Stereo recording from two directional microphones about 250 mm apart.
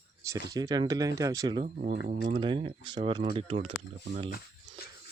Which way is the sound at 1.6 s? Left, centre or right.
Right.